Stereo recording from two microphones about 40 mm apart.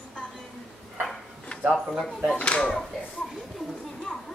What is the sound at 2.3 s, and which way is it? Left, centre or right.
Speech, left.